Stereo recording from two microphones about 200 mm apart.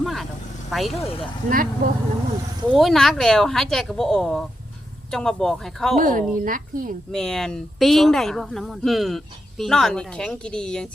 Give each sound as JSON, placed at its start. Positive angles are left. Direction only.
{"t": 0.0, "sound": "vehicle", "side_deg": 0}
{"t": 0.7, "sound": "speech", "side_deg": 0}
{"t": 1.5, "sound": "speech", "side_deg": -45}
{"t": 2.7, "sound": "speech", "side_deg": 0}
{"t": 6.0, "sound": "speech", "side_deg": -40}
{"t": 7.1, "sound": "speech", "side_deg": 5}